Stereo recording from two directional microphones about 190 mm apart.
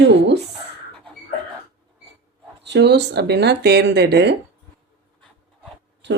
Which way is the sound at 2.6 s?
65° right (ahead or behind).